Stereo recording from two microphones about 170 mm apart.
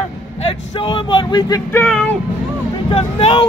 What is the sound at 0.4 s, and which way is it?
Speech, 30° left (ahead or behind).